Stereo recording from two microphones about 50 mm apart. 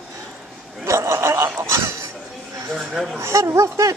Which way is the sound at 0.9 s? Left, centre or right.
Right.